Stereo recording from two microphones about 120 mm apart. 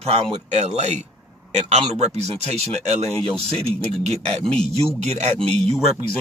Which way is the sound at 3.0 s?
5° left (ahead or behind).